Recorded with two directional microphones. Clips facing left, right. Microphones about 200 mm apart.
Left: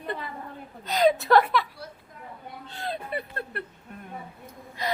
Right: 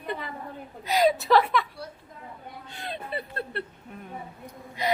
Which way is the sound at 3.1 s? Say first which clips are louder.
Even; 30° right (ahead or behind).